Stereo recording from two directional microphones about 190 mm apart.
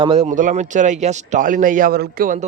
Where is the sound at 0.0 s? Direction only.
30° right (ahead or behind).